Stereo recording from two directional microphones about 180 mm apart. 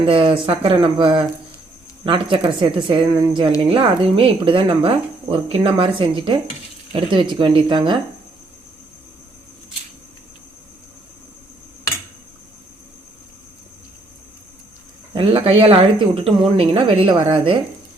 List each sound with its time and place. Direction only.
0.0 s speech: 30° right (ahead or behind)
15.1 s speech: 30° right (ahead or behind)